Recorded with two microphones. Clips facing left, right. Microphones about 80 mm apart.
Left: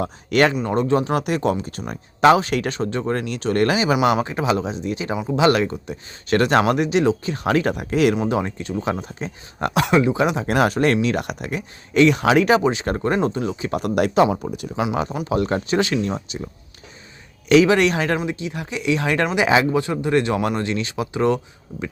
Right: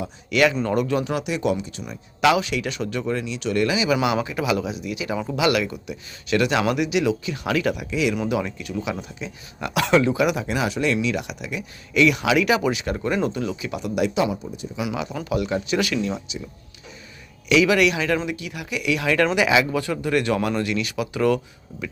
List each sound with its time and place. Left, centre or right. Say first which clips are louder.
0.0 s speech: left 2 dB; left
0.6 s speech: left 3 dB; left
7.9 s speech: left 5 dB; left
8.3 s speech: left 2 dB; left
9.7 s speech: left 1 dB; left
10.4 s speech: left 5 dB; left
14.8 s speech: left 5 dB; left
15.1 s speech: left 3 dB; left
15.4 s speech: left 3 dB; left
17.5 s speech: left 3 dB; left
18.3 s speech: left 2 dB; left